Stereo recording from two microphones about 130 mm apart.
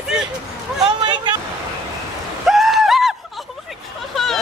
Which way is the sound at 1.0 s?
35° right (ahead or behind).